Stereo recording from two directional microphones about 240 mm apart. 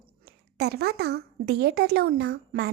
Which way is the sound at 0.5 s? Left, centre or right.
Right.